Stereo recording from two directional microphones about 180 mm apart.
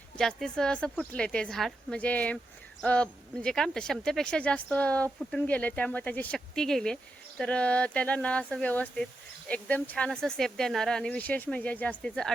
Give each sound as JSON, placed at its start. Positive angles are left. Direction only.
{"t": 0.2, "sound": "speech", "side_deg": 0}